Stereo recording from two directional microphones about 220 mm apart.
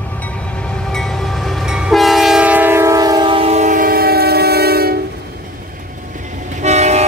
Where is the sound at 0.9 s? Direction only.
Centre (ahead or behind); by 4.9 s 45° right (ahead or behind).